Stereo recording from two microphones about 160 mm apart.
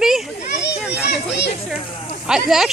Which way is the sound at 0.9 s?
90° left.